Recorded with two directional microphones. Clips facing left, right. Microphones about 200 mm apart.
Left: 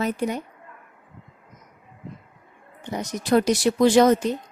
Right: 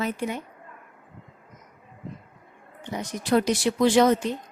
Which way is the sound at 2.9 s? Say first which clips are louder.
Left 2 dB; 40° left (ahead or behind).